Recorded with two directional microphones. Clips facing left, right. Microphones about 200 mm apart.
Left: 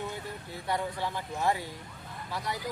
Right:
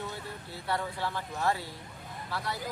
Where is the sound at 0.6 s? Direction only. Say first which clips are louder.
Left 1 dB; 15° left (ahead or behind).